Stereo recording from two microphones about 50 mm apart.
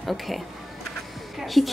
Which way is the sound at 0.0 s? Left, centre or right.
Centre.